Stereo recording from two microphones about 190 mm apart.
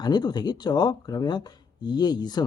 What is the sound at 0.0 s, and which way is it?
Speech, 20° left (ahead or behind).